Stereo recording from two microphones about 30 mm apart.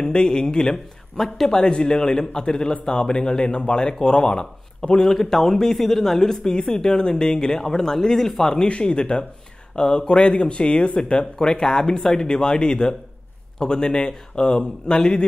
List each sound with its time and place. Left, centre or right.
0.0 s speech: left
1.1 s speech: centre
1.5 s speech: left
5.0 s speech: centre
8.6 s speech: left